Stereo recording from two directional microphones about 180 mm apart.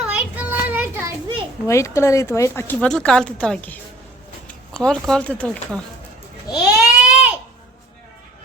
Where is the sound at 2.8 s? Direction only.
5° left (ahead or behind).